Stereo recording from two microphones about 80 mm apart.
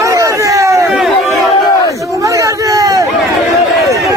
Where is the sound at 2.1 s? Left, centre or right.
Right.